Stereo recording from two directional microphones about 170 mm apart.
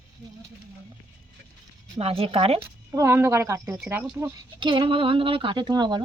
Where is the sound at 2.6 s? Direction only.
15° right (ahead or behind).